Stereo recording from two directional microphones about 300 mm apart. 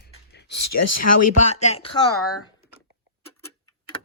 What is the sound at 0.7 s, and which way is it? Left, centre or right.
Speech, left.